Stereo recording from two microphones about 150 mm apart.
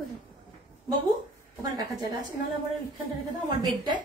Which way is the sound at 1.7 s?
25° right (ahead or behind).